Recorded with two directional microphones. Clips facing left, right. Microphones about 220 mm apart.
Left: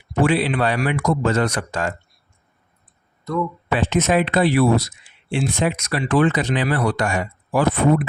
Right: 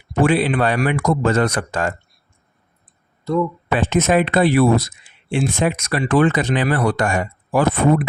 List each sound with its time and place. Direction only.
0.2 s speech: 50° right (ahead or behind)
3.3 s speech: 30° right (ahead or behind)
3.7 s speech: 50° right (ahead or behind)